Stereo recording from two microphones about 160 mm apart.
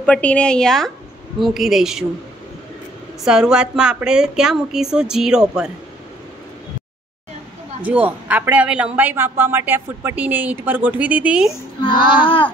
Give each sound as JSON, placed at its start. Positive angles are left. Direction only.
{"t": 0.0, "sound": "a woman's voice", "side_deg": 10}
{"t": 3.3, "sound": "a woman's voice", "side_deg": -5}
{"t": 7.8, "sound": "speech", "side_deg": -10}
{"t": 11.8, "sound": "child singing", "side_deg": 30}